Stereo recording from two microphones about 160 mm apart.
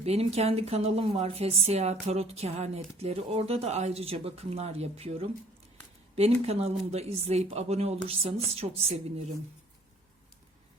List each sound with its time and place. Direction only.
0.0 s a woman's voice: 40° right (ahead or behind)